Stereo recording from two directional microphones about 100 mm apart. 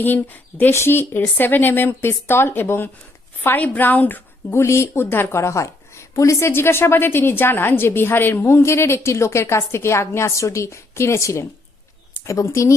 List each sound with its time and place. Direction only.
0.0 s a woman's voice: 20° left (ahead or behind)
4.5 s a woman's voice: 30° left (ahead or behind)